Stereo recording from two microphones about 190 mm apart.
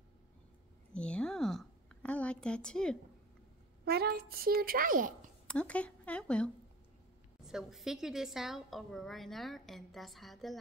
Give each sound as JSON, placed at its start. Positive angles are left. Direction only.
{"t": 0.9, "sound": "a sound", "side_deg": 5}
{"t": 3.8, "sound": "speech", "side_deg": -55}
{"t": 5.5, "sound": "a woman's voice", "side_deg": 5}